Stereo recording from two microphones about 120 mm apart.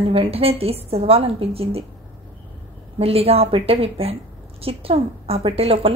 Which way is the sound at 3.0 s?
55° right (ahead or behind).